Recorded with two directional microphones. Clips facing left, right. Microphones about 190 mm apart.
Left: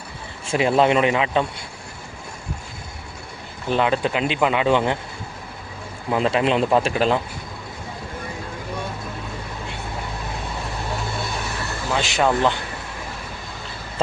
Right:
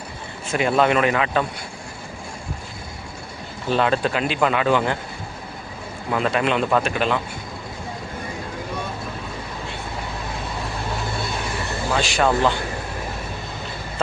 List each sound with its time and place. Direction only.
0.4 s speech: 25° left (ahead or behind)
3.7 s speech: 15° left (ahead or behind)
6.1 s speech: 25° left (ahead or behind)
11.9 s speech: 20° left (ahead or behind)